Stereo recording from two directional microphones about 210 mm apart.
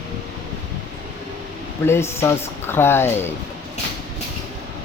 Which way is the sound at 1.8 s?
10° left (ahead or behind).